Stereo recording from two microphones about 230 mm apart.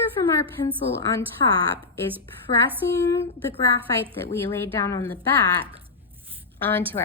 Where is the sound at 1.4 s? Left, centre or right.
Left.